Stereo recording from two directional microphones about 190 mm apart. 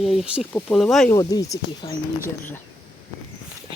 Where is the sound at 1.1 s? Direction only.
20° left (ahead or behind).